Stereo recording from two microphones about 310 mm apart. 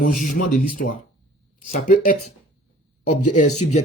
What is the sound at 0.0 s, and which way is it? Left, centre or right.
Speech, left.